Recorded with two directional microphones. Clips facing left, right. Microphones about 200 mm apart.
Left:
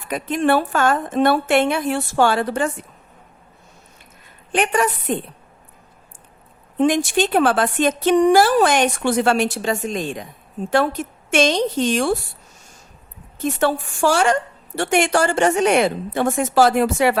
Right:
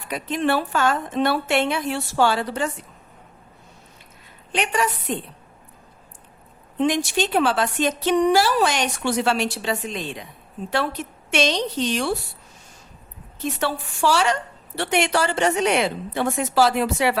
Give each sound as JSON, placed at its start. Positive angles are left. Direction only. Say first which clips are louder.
{"t": 0.1, "sound": "a woman's voice", "louder": "left 4 dB", "side_deg": 50}
{"t": 4.5, "sound": "a woman's voice", "louder": "left 4 dB", "side_deg": 50}
{"t": 6.7, "sound": "a woman's voice", "louder": "left 4 dB", "side_deg": 50}
{"t": 13.4, "sound": "a woman's voice", "louder": "left 6 dB", "side_deg": 50}